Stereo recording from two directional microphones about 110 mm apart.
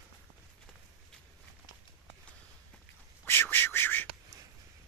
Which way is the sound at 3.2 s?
20° left (ahead or behind).